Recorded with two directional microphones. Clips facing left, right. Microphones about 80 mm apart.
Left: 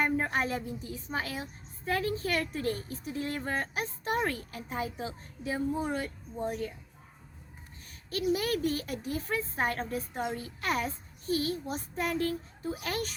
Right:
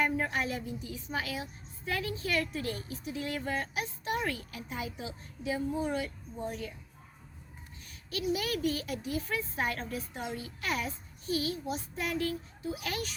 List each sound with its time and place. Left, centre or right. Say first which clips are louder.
0.0 s a woman's voice: left 1 dB; left
7.9 s a woman's voice: left 3 dB; left